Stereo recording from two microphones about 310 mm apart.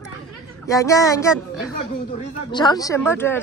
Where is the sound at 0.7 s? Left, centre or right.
Centre.